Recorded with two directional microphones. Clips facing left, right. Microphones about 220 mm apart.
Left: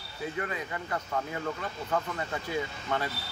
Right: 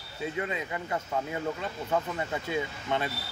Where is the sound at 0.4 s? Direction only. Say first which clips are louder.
Right 2 dB; 20° right (ahead or behind).